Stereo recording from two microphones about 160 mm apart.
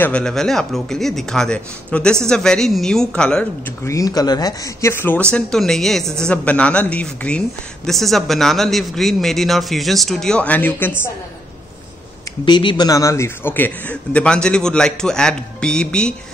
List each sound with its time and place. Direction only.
0.0 s a woman's voice: 5° left (ahead or behind)
3.8 s a woman's voice: 20° left (ahead or behind)
12.4 s a man's voice: 30° left (ahead or behind); by 16.2 s 5° left (ahead or behind)